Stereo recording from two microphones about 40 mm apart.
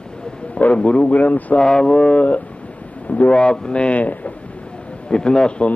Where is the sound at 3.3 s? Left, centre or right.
Left.